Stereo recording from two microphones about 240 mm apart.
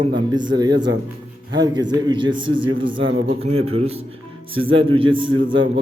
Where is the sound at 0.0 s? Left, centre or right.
Centre.